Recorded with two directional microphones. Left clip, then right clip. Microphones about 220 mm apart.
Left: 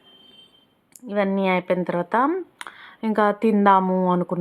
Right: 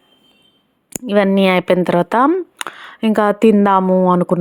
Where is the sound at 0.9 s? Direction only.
35° right (ahead or behind).